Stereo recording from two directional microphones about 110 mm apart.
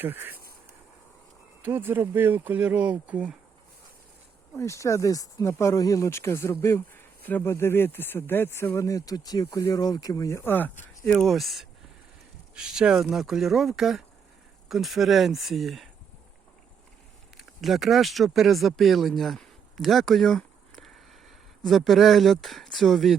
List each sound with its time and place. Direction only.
0.0 s speech: 20° right (ahead or behind)
1.6 s speech: 20° right (ahead or behind)
4.5 s speech: 25° left (ahead or behind)
11.0 s speech: centre (ahead or behind)
17.3 s speech: centre (ahead or behind)